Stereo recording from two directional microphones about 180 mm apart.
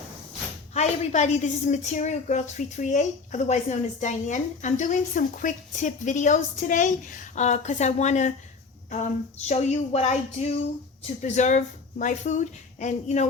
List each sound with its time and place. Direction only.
0.7 s a woman's voice: 40° left (ahead or behind)